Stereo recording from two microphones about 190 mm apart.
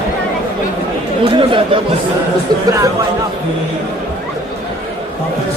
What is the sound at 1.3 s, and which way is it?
Chatter, 25° right (ahead or behind).